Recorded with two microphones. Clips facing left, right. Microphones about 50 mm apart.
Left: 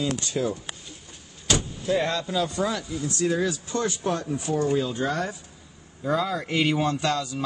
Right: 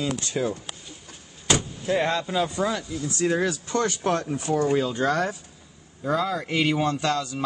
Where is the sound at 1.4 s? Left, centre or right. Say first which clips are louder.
Right 1 dB; right.